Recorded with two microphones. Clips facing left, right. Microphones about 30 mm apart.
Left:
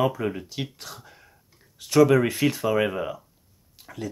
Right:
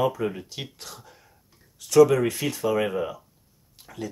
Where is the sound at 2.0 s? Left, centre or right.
Left.